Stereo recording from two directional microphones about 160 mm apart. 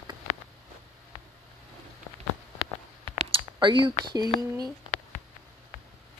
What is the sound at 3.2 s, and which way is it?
Speech, 30° right (ahead or behind).